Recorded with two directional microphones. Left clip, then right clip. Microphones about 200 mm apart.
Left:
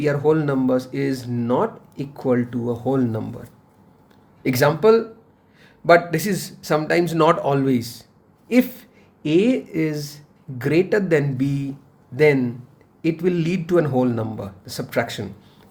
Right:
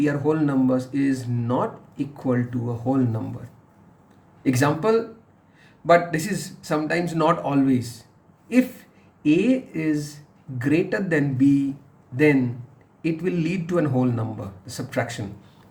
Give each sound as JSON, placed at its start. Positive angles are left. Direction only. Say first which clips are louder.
{"t": 0.0, "sound": "speech", "louder": "left 3 dB", "side_deg": 40}
{"t": 4.4, "sound": "speech", "louder": "left 5 dB", "side_deg": 40}